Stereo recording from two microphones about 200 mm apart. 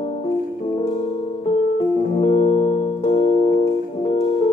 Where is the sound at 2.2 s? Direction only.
30° left (ahead or behind).